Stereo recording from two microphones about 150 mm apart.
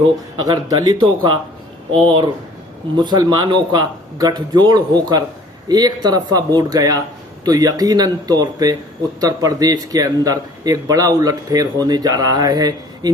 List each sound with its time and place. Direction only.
0.3 s a man's voice: 25° right (ahead or behind)